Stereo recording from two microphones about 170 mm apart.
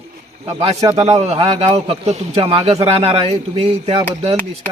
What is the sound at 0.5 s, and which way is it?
A man's voice, 35° right (ahead or behind).